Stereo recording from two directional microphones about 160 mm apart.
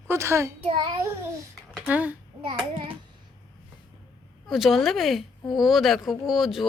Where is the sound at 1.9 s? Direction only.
10° right (ahead or behind).